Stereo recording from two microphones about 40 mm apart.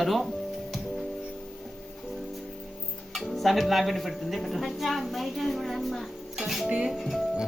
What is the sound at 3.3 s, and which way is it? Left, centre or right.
Music, centre.